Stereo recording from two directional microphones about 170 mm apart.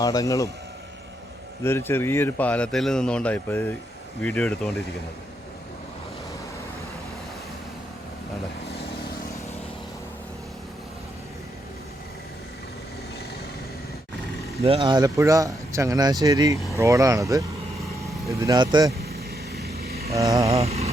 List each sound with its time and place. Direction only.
0.0 s speech: 20° left (ahead or behind)
1.6 s a man's voice: 15° left (ahead or behind)
8.6 s vehicle: 70° left (ahead or behind)
14.6 s speech: 35° right (ahead or behind)
19.5 s vehicle: 65° right (ahead or behind)
20.1 s speech: 20° right (ahead or behind)
20.5 s vehicle: 35° right (ahead or behind)